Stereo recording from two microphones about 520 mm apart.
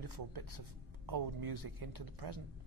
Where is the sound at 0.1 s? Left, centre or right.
Right.